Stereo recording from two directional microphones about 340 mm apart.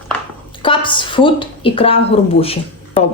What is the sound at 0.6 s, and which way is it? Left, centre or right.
A woman's voice, centre.